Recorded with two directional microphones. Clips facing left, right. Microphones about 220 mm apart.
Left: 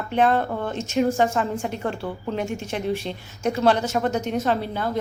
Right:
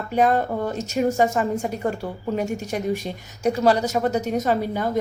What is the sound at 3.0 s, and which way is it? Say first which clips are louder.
Speech: right 2 dB; 10° right (ahead or behind).